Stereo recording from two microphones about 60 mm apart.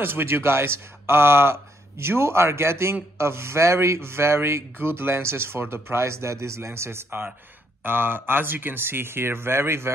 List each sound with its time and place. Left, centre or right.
0.0 s speech: right